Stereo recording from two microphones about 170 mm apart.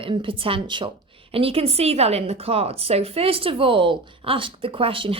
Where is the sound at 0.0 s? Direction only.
30° right (ahead or behind).